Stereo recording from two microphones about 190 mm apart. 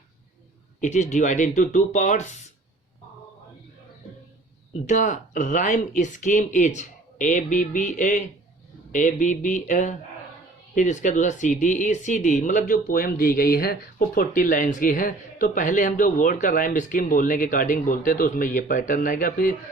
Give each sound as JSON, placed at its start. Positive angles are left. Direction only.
{"t": 0.8, "sound": "speech", "side_deg": 40}
{"t": 4.9, "sound": "speech", "side_deg": 40}